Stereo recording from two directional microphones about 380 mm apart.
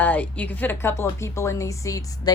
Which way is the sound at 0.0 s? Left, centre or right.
Centre.